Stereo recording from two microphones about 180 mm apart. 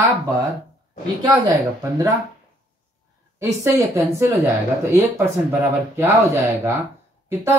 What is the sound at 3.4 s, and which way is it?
Speech, 15° right (ahead or behind).